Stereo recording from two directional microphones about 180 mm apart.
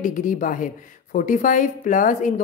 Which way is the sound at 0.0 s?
45° left (ahead or behind).